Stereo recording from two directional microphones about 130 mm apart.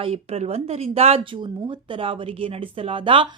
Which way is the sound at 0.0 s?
50° right (ahead or behind).